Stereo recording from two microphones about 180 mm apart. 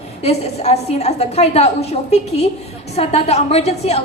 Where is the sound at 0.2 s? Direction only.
35° left (ahead or behind).